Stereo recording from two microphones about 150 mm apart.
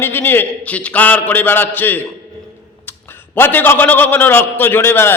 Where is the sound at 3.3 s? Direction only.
15° left (ahead or behind).